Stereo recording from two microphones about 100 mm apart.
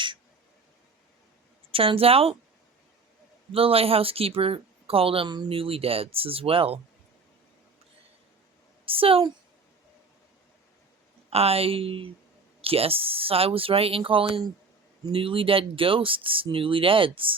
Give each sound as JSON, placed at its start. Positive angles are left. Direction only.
{"t": 1.7, "sound": "speech", "side_deg": -65}
{"t": 3.5, "sound": "speech", "side_deg": -70}
{"t": 8.9, "sound": "speech", "side_deg": -65}
{"t": 11.3, "sound": "speech", "side_deg": -85}